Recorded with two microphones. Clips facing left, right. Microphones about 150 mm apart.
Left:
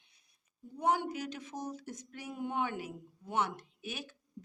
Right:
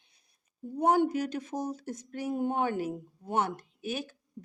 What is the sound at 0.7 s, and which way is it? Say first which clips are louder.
Speech: right 7 dB; 45° right (ahead or behind).